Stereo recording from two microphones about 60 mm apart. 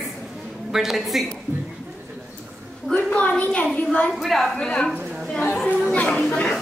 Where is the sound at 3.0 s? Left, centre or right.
Left.